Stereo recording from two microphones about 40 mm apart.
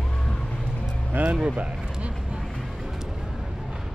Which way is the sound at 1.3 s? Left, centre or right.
Centre.